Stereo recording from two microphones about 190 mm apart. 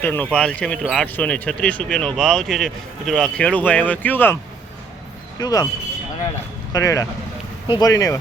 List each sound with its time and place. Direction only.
0.0 s speech: 10° left (ahead or behind)
5.4 s speech: 20° left (ahead or behind)
6.7 s speech: 15° left (ahead or behind)